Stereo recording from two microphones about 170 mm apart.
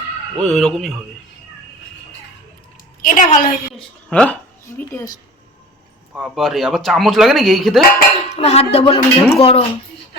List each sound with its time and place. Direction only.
0.4 s speech: 5° left (ahead or behind)
3.0 s a woman's voice: 50° left (ahead or behind)
4.1 s a woman's voice: 10° left (ahead or behind)
6.1 s speech: centre (ahead or behind)
8.3 s speech: 40° left (ahead or behind)